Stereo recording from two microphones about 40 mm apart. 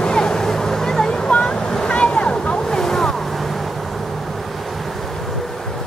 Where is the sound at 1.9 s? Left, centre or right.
Left; by 5.8 s centre.